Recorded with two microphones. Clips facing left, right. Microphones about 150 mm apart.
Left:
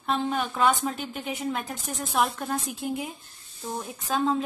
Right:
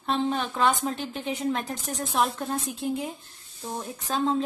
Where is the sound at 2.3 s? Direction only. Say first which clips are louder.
Even; 25° right (ahead or behind).